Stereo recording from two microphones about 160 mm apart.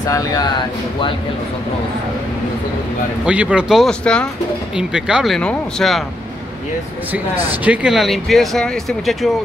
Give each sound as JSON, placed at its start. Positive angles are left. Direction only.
{"t": 0.0, "sound": "speech", "side_deg": 20}
{"t": 3.3, "sound": "speech", "side_deg": -5}
{"t": 7.6, "sound": "speech", "side_deg": -5}